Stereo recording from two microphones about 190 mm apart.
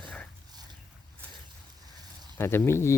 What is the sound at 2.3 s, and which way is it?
Speech, 15° left (ahead or behind).